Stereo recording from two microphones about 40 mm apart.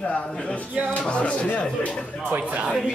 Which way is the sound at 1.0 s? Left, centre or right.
Left.